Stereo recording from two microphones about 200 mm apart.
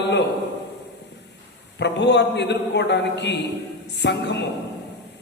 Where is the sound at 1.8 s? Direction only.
60° left (ahead or behind).